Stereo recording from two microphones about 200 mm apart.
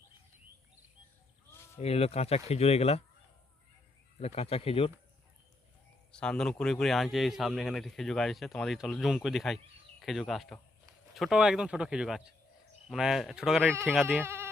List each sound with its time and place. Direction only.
1.8 s speech: 30° left (ahead or behind)
4.4 s speech: 30° left (ahead or behind)
6.1 s speech: 5° left (ahead or behind)
14.2 s a sound: 10° right (ahead or behind)